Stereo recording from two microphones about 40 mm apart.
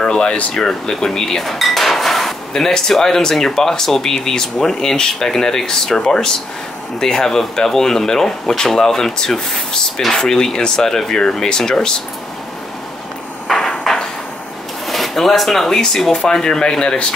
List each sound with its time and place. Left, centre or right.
0.0 s air conditioning: left
0.6 s speech: centre
1.4 s speech: centre
13.5 s a sound: centre
14.9 s drawer open or close: centre
15.6 s speech: centre